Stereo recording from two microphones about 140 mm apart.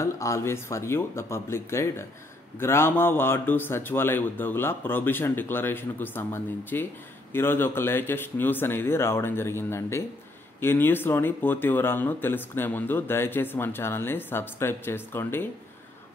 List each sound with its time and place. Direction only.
0.0 s speech: 20° left (ahead or behind)